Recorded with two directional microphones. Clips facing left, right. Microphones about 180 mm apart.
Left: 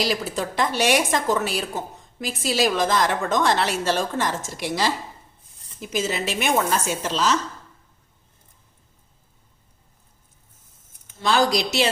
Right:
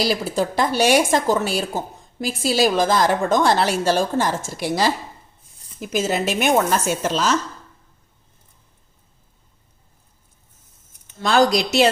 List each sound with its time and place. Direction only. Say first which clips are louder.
0.0 s a woman's voice: right 4 dB; 35° right (ahead or behind)
11.2 s a woman's voice: right 3 dB; 50° right (ahead or behind)